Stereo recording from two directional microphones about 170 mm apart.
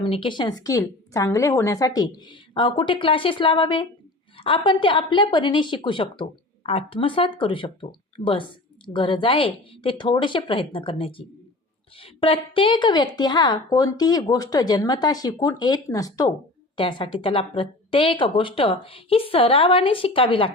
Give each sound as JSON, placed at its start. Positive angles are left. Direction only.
{"t": 0.0, "sound": "a woman's voice", "side_deg": 30}